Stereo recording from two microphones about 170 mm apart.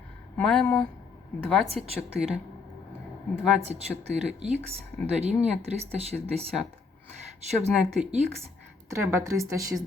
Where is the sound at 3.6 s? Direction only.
40° right (ahead or behind).